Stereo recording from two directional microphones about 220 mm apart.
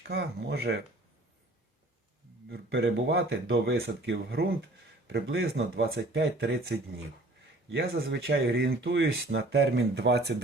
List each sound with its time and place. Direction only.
0.1 s speech: 50° right (ahead or behind)
2.5 s speech: 50° right (ahead or behind)